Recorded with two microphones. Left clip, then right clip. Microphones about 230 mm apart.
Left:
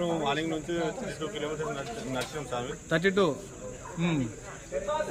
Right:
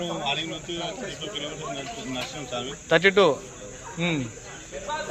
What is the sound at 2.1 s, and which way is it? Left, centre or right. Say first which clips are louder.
Speech: right 1 dB; centre.